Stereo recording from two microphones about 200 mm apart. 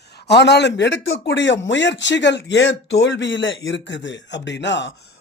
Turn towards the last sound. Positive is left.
turn(degrees=60)  # may be behind; listen again after turning